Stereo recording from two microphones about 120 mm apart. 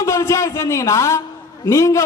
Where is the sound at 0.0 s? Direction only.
25° left (ahead or behind).